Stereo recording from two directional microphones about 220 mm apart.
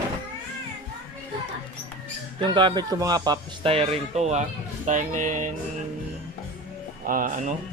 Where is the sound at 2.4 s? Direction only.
20° right (ahead or behind).